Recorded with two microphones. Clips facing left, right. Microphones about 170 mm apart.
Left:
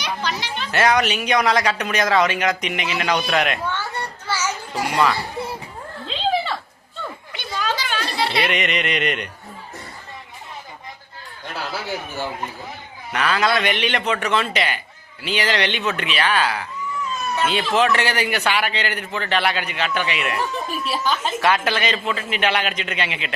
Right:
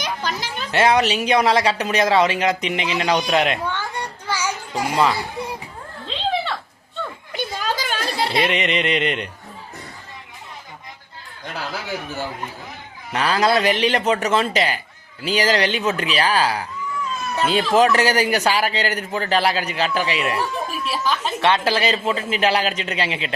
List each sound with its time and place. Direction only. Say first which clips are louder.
0.0 s children playing: even; 45° right (ahead or behind)
0.7 s speech: right 2 dB; 30° right (ahead or behind)
3.7 s children playing: even; 15° right (ahead or behind)
4.9 s speech: right 1 dB; 25° right (ahead or behind)
6.1 s cat: left 1 dB; centre (ahead or behind)
7.3 s a sound: right 1 dB; 40° right (ahead or behind)
8.4 s speech: right 3 dB; 30° right (ahead or behind)
13.1 s a man's voice: right 2 dB; 35° right (ahead or behind)
20.4 s speech: even; centre (ahead or behind)
21.4 s a man's voice: right 2 dB; 30° right (ahead or behind)